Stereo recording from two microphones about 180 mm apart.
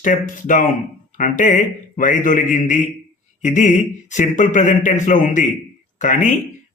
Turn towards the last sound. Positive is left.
turn(degrees=45)  # may be behind; listen again after turning